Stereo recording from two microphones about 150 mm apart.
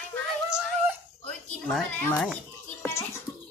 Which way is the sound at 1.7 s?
10° left (ahead or behind).